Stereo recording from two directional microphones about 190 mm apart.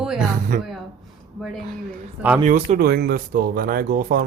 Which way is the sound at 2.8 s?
55° right (ahead or behind).